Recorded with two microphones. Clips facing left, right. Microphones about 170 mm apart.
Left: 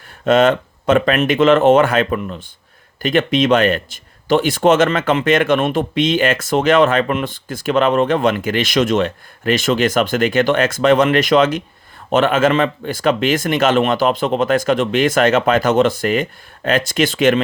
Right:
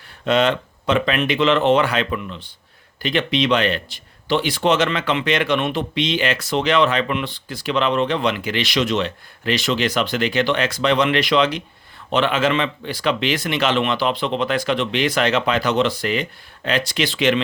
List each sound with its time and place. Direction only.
0.3 s speech: 50° left (ahead or behind)